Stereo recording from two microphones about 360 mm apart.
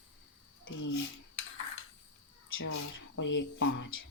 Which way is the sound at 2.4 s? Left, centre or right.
Left.